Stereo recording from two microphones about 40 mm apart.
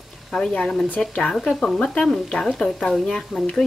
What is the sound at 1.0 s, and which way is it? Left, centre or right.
Speech, centre.